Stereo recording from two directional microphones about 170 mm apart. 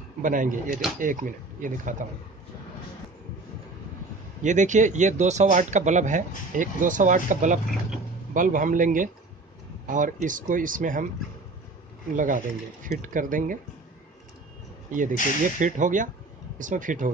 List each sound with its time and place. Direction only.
0.2 s speech: 50° right (ahead or behind)
0.7 s speech: centre (ahead or behind)
0.9 s speech: 50° right (ahead or behind)
4.4 s speech: 45° right (ahead or behind)
12.1 s speech: 50° right (ahead or behind)
14.9 s speech: 50° right (ahead or behind)